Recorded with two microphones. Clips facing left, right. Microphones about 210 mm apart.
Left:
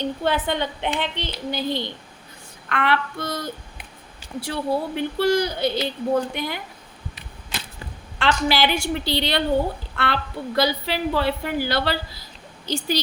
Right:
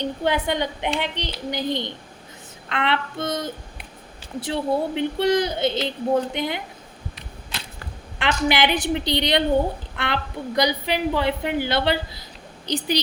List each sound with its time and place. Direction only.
0.0 s a woman's voice: 15° right (ahead or behind)
8.2 s a woman's voice: 15° right (ahead or behind)